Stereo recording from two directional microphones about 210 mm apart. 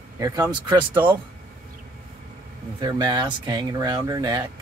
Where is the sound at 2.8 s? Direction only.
15° right (ahead or behind).